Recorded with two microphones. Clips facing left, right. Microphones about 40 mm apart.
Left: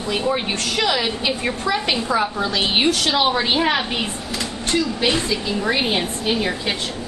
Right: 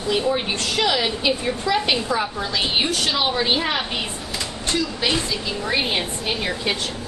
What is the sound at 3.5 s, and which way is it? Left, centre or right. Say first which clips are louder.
Speech: left 3 dB; centre.